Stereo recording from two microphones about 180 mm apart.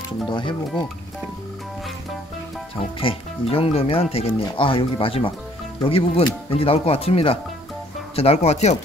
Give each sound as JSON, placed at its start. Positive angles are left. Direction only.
{"t": 0.3, "sound": "speech", "side_deg": 25}
{"t": 3.0, "sound": "speech", "side_deg": 30}